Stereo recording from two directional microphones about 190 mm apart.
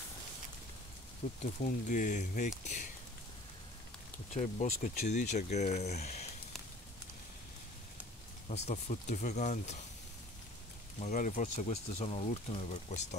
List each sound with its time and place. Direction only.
1.4 s speech: 40° left (ahead or behind)
4.3 s speech: 35° left (ahead or behind)
8.5 s speech: 35° left (ahead or behind)
11.0 s speech: 40° left (ahead or behind)